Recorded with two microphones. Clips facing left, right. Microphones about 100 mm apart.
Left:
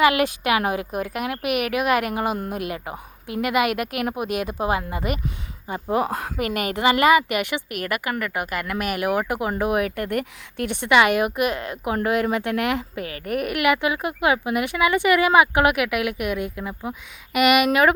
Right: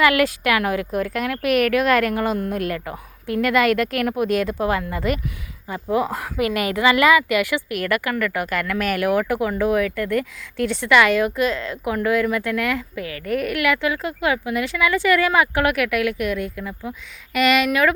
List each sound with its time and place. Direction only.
0.0 s speech: 20° left (ahead or behind)
6.1 s a woman's voice: 50° left (ahead or behind)
6.4 s speech: 30° left (ahead or behind)
7.9 s speech: 10° left (ahead or behind)
13.0 s a woman's voice: 30° left (ahead or behind)
13.3 s speech: 15° left (ahead or behind)